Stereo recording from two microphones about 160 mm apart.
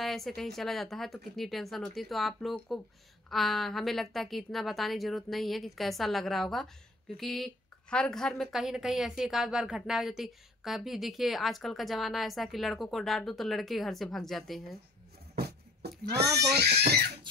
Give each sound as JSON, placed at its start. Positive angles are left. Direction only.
{"t": 0.0, "sound": "a woman's voice", "side_deg": 0}
{"t": 15.3, "sound": "a sound", "side_deg": -90}
{"t": 16.3, "sound": "a child's voice", "side_deg": -90}